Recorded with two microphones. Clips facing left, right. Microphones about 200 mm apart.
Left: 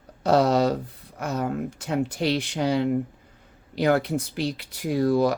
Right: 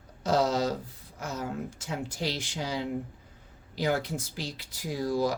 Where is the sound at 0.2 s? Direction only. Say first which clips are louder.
Left 6 dB; 65° left (ahead or behind).